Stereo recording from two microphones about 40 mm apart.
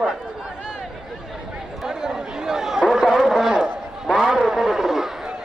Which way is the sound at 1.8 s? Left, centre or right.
Centre.